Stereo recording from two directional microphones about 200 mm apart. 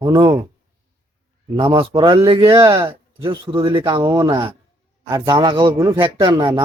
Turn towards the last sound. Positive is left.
turn(degrees=-25)  # may be behind; listen again after turning